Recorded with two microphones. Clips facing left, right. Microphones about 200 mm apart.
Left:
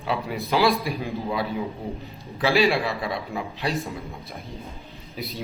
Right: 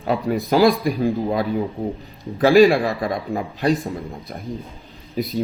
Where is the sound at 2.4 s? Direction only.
50° right (ahead or behind).